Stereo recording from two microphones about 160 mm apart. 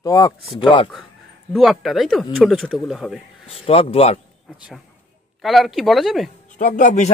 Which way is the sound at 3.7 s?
40° left (ahead or behind).